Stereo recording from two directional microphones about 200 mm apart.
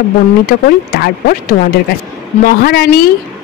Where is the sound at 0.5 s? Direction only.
50° left (ahead or behind).